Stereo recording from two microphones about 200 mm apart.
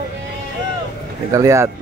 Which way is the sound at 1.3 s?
15° right (ahead or behind).